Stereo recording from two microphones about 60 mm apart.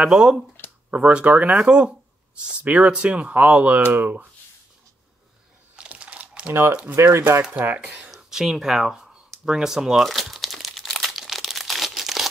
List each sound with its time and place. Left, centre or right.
0.0 s speech: centre
5.8 s typing: centre
6.9 s speech: right
7.7 s speech: right
8.2 s speech: centre
10.0 s crumpling: centre